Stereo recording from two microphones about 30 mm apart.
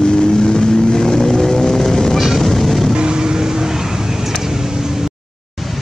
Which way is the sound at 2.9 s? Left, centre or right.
Right.